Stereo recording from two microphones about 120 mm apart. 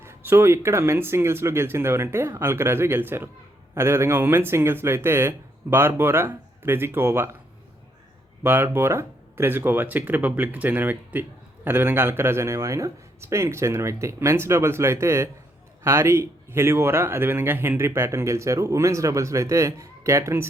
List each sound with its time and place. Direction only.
0.0 s speech: 20° right (ahead or behind)
8.4 s speech: 15° right (ahead or behind)